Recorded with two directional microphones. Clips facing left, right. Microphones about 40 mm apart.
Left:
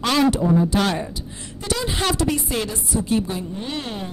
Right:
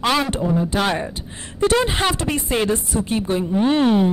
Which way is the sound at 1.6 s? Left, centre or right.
Right.